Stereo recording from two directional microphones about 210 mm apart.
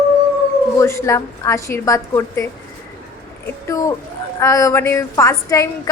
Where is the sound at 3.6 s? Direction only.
15° left (ahead or behind).